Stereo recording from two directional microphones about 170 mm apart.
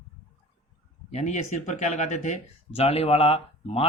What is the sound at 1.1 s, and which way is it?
Speech, 45° left (ahead or behind).